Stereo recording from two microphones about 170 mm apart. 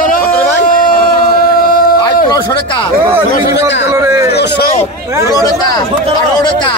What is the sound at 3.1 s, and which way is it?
Speech, 15° right (ahead or behind).